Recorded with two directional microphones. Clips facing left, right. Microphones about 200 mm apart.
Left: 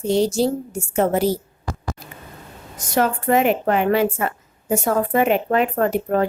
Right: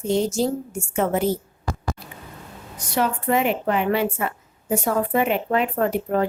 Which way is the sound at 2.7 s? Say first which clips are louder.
Left 3 dB; 45° left (ahead or behind).